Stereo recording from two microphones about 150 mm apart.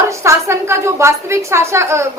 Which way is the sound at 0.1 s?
20° right (ahead or behind).